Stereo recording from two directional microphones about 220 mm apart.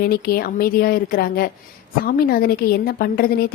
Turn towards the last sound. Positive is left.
turn(degrees=40)  # may be behind; listen again after turning